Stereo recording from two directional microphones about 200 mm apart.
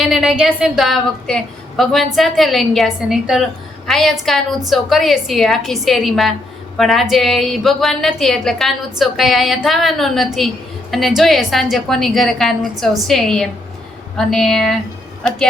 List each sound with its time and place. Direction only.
0.0 s a woman's voice: centre (ahead or behind)